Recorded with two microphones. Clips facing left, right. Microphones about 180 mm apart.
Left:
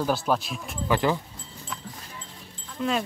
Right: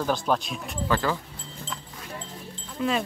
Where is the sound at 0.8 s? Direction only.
15° left (ahead or behind).